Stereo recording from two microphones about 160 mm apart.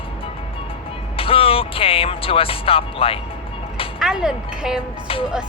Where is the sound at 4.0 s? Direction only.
5° right (ahead or behind).